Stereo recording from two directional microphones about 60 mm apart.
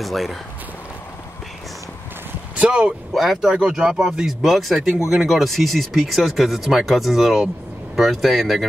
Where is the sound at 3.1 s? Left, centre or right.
Centre.